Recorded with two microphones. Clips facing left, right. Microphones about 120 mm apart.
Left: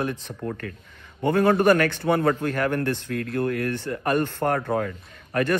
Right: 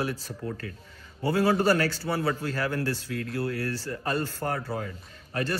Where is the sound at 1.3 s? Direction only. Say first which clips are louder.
Left 5 dB; 50° left (ahead or behind).